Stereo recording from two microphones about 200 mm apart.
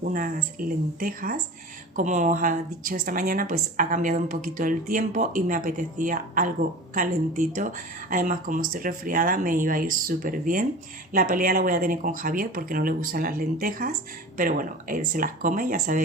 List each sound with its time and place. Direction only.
0.0 s a woman's voice: 45° right (ahead or behind)